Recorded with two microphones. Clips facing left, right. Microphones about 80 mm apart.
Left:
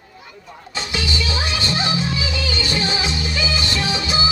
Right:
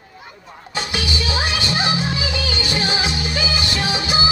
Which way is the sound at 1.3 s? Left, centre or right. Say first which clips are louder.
Right 1 dB; right.